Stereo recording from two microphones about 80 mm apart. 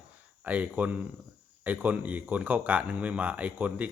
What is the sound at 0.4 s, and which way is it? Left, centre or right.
Speech, centre.